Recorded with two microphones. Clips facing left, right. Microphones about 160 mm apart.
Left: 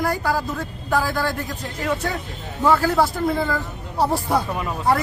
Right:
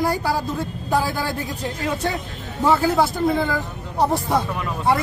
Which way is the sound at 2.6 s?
25° right (ahead or behind).